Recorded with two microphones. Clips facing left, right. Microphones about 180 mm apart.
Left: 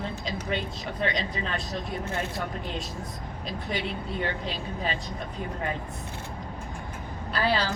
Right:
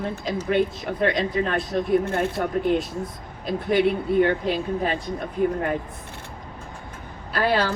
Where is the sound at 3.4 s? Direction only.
55° right (ahead or behind).